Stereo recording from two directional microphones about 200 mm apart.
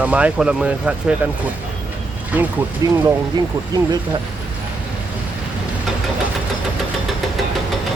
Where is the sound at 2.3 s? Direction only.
10° right (ahead or behind).